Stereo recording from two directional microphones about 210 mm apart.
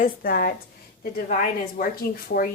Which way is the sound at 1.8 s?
45° left (ahead or behind).